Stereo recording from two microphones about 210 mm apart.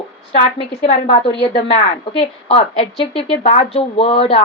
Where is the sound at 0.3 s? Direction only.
30° left (ahead or behind).